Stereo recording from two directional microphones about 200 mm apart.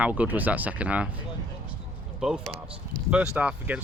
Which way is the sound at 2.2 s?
5° right (ahead or behind).